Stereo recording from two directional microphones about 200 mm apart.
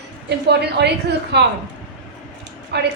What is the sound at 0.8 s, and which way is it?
Speech, 60° right (ahead or behind).